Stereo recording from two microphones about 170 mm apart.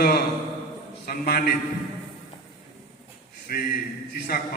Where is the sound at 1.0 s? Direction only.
65° left (ahead or behind).